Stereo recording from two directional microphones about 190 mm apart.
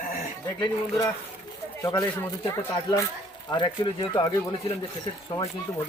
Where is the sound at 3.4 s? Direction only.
25° left (ahead or behind).